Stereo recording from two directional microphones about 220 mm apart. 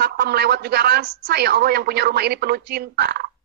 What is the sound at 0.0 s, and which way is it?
A woman's voice, 45° right (ahead or behind).